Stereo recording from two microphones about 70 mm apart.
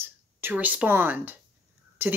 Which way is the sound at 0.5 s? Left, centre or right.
Right.